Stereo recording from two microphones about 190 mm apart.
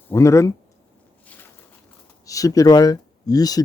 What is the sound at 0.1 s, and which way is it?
Speech, 15° left (ahead or behind).